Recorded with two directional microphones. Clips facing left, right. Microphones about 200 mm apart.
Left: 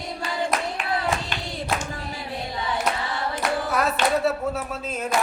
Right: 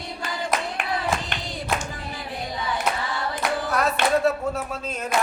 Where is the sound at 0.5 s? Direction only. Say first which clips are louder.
Right 2 dB; centre (ahead or behind).